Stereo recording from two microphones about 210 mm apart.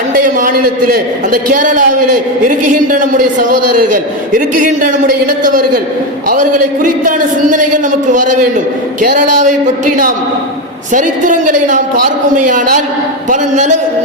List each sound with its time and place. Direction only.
0.1 s a man's voice: 40° right (ahead or behind)